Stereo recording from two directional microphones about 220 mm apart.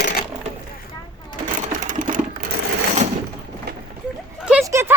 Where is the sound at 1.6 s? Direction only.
35° right (ahead or behind).